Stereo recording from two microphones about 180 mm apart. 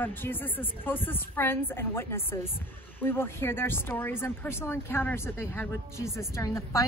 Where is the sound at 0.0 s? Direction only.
10° left (ahead or behind).